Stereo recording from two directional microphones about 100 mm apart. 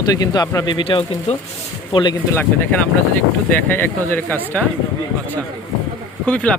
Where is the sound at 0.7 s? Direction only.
60° left (ahead or behind).